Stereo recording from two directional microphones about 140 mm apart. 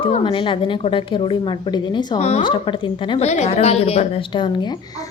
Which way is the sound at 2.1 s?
50° left (ahead or behind).